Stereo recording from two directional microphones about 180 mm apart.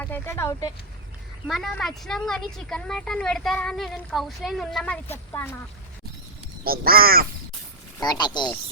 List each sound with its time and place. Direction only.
0.0 s speech: 15° left (ahead or behind)
1.5 s a woman's voice: centre (ahead or behind)
6.7 s speech: 55° right (ahead or behind)
7.9 s speech: 20° left (ahead or behind)